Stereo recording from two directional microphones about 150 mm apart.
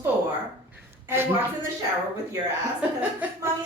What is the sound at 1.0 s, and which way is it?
Speech, 15° right (ahead or behind).